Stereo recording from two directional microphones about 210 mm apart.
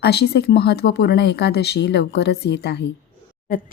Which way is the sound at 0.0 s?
50° left (ahead or behind).